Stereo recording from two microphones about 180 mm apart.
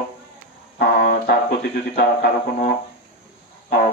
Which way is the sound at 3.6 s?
60° left (ahead or behind).